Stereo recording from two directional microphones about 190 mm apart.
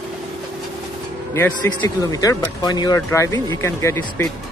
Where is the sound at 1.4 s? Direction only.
15° left (ahead or behind).